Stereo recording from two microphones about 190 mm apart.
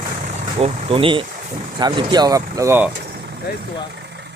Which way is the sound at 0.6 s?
30° right (ahead or behind).